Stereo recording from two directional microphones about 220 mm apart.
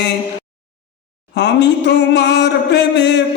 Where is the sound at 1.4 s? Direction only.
50° left (ahead or behind).